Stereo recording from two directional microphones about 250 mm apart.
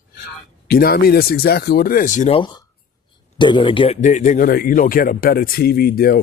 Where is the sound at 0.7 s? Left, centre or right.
Left.